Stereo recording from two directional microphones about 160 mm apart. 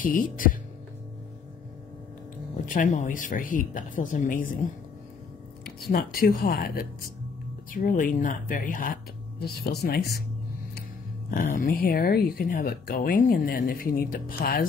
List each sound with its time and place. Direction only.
0.0 s speech: 60° left (ahead or behind)
2.6 s speech: 55° left (ahead or behind)
5.9 s speech: 70° left (ahead or behind)
7.7 s speech: 60° left (ahead or behind); by 10.2 s 85° left
11.5 s speech: 65° left (ahead or behind)